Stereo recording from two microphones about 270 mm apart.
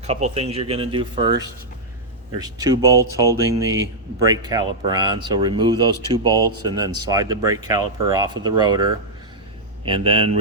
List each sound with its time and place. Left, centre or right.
0.1 s speech: right